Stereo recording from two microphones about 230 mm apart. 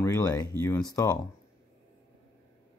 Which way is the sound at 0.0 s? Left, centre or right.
Centre.